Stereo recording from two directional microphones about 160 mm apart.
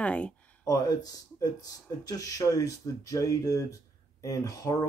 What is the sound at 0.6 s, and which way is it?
Speech, 20° left (ahead or behind).